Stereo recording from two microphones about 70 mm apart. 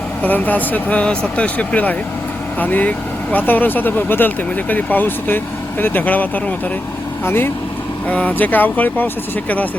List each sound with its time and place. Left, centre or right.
0.2 s speech: left
8.0 s speech: left